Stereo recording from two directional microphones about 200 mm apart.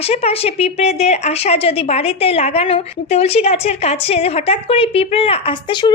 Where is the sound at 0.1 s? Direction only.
30° left (ahead or behind).